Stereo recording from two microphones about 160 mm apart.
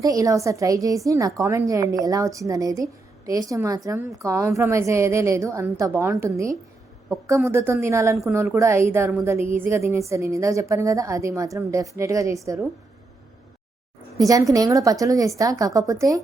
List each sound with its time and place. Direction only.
0.0 s a woman's voice: 20° right (ahead or behind)
14.2 s a woman's voice: 20° right (ahead or behind)